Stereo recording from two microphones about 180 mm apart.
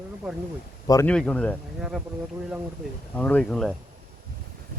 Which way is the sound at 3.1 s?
10° left (ahead or behind).